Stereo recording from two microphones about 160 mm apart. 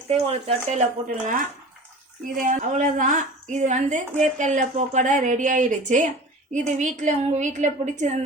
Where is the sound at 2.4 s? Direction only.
55° right (ahead or behind).